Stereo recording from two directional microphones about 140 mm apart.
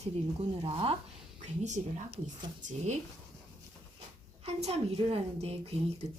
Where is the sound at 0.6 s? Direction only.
40° right (ahead or behind).